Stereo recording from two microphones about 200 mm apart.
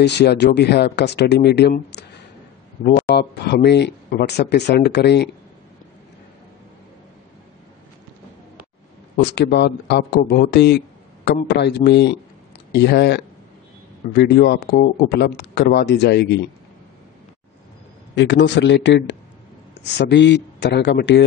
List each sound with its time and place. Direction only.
0.0 s speech: 55° left (ahead or behind)
9.1 s speech: 55° left (ahead or behind)
18.1 s a man's voice: 65° left (ahead or behind)